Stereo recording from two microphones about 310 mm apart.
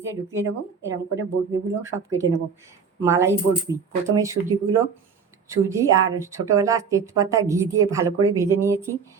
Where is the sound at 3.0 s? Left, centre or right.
Centre.